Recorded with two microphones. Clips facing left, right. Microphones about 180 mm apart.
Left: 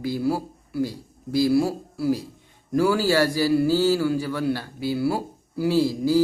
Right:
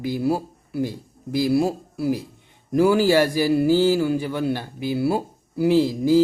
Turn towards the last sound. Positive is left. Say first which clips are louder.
# right 3 dB
turn(degrees=-20)  # may be behind; listen again after turning